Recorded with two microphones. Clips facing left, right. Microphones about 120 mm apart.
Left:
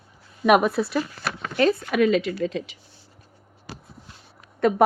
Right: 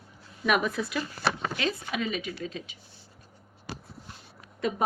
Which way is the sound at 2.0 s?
80° left.